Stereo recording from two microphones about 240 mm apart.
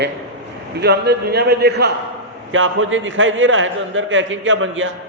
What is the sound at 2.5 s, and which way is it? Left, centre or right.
A man's voice, right.